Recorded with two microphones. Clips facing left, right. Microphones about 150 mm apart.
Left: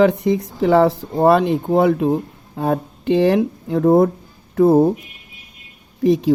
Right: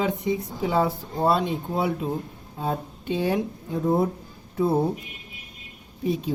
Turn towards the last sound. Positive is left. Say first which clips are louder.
# left 10 dB
turn(degrees=90)